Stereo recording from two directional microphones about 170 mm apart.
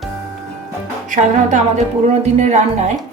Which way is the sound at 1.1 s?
45° right (ahead or behind).